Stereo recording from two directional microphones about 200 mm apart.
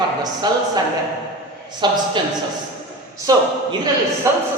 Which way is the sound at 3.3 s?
20° right (ahead or behind).